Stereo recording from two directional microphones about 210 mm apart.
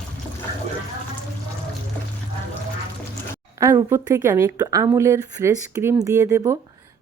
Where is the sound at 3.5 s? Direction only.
15° right (ahead or behind).